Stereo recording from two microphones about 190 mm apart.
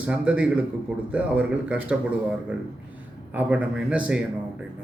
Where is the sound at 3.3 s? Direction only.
10° right (ahead or behind).